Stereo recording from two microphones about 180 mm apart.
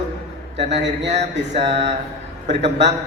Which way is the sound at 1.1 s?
35° right (ahead or behind).